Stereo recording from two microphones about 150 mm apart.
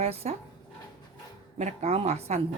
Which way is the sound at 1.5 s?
50° right (ahead or behind).